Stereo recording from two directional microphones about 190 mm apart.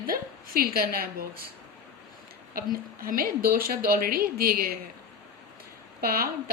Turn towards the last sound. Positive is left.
turn(degrees=-50)  # may be behind; listen again after turning